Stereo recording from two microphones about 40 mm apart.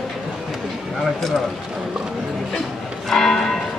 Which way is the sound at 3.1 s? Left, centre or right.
Centre.